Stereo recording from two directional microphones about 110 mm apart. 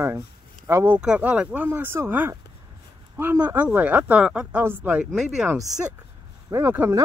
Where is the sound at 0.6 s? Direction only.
25° right (ahead or behind).